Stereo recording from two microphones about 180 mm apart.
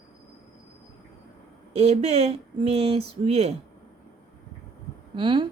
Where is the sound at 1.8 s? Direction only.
35° right (ahead or behind).